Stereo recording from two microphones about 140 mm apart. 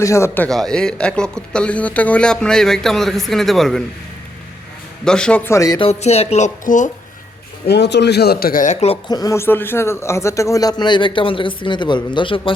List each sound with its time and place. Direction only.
0.0 s speech: 20° left (ahead or behind)
0.4 s speech: 5° left (ahead or behind)
5.0 s speech: 5° left (ahead or behind)
5.5 s speech: 25° left (ahead or behind)
5.8 s speech: 50° left (ahead or behind)
8.3 s speech: 90° left; by 9.0 s 55° left (ahead or behind)
9.0 s speech: 25° left (ahead or behind)